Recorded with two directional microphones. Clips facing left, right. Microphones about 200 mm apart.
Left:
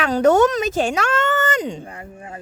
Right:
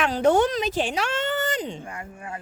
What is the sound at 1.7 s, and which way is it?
Speech, 35° left (ahead or behind).